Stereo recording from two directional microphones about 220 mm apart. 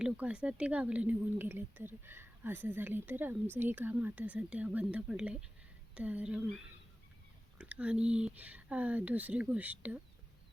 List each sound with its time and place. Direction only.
0.0 s a woman's voice: 5° right (ahead or behind)
7.6 s speech: 5° right (ahead or behind)